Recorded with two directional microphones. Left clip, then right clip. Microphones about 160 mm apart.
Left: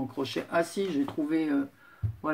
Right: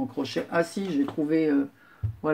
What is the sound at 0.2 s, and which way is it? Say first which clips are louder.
Speech: right 2 dB; 15° right (ahead or behind).